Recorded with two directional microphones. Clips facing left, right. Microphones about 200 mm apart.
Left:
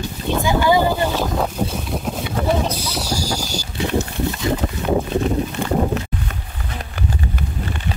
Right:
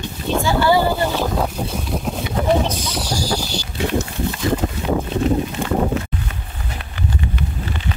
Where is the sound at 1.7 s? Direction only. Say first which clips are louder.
Right 1 dB; centre (ahead or behind).